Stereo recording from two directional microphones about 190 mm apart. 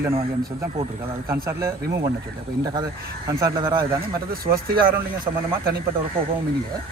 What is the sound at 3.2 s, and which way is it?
Speech, 15° right (ahead or behind).